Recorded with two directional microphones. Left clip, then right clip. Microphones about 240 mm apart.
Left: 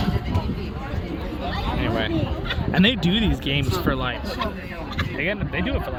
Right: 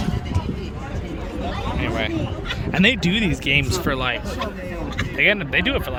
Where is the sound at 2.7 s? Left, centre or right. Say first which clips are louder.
Right 3 dB; centre.